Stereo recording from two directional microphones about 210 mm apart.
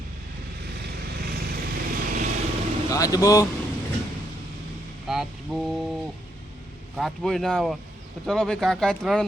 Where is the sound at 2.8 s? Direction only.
15° left (ahead or behind).